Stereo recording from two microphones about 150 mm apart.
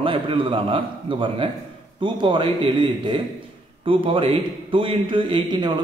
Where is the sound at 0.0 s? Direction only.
35° right (ahead or behind).